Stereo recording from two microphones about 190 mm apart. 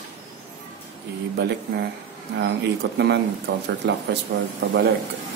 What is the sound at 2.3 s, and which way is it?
Speech, 65° right (ahead or behind).